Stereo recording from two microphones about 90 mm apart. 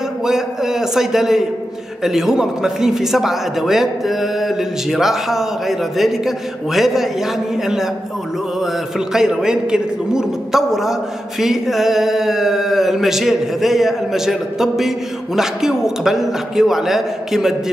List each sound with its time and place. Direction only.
0.2 s a man's voice: 5° right (ahead or behind)